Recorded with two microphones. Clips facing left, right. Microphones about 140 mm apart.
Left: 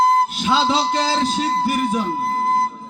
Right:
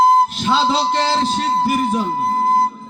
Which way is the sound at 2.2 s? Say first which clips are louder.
Right 6 dB; 25° right (ahead or behind).